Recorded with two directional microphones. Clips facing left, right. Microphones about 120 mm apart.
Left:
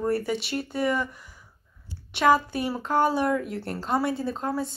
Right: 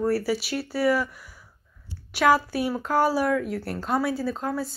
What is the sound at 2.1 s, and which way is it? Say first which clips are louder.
Speech: even; 5° right (ahead or behind).